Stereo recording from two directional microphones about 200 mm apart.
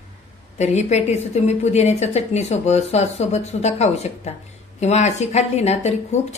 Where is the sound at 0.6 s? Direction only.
35° left (ahead or behind).